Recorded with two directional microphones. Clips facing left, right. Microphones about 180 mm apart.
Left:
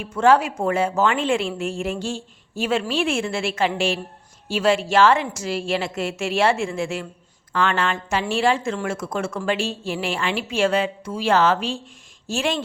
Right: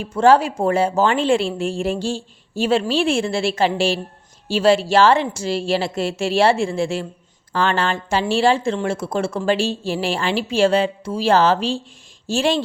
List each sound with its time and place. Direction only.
0.0 s speech: 35° right (ahead or behind)